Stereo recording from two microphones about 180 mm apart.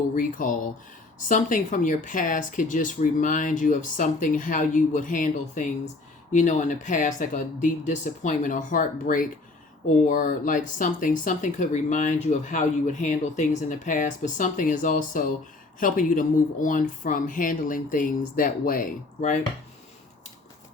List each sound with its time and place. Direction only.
0.2 s speech: 50° left (ahead or behind)